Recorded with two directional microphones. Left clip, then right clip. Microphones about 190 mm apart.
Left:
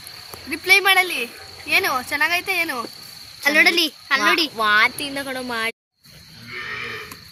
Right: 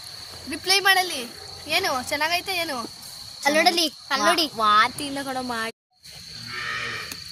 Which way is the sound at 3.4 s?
55° right (ahead or behind).